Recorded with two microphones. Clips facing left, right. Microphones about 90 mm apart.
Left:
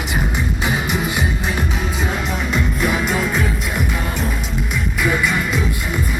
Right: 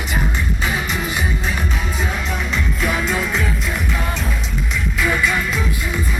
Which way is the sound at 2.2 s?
10° left (ahead or behind).